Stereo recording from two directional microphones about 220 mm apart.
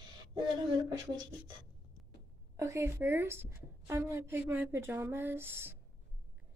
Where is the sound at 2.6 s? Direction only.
15° right (ahead or behind).